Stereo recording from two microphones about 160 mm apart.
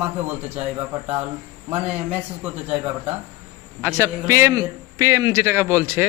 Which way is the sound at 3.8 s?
15° right (ahead or behind).